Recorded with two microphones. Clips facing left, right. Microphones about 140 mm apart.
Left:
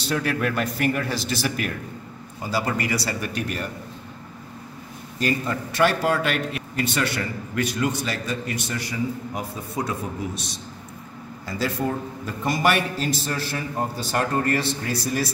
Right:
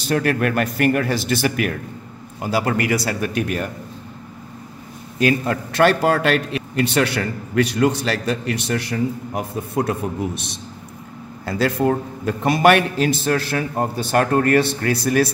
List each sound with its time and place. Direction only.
0.1 s a man's voice: 55° right (ahead or behind)
5.2 s a man's voice: 70° right (ahead or behind)